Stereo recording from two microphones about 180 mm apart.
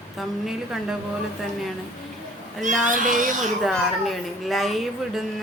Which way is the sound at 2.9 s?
45° right (ahead or behind).